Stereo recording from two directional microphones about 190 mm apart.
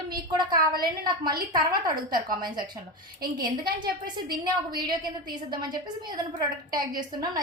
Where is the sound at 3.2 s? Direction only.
50° right (ahead or behind).